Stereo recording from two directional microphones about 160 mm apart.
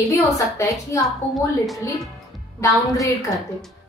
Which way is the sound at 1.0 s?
Centre (ahead or behind).